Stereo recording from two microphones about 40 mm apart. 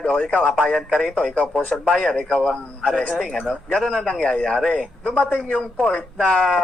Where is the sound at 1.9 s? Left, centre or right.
Centre.